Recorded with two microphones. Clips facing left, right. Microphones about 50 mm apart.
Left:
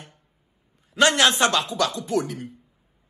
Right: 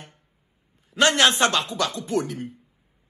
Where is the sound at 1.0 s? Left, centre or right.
Right.